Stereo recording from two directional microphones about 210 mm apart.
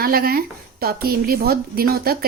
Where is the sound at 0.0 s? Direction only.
45° right (ahead or behind).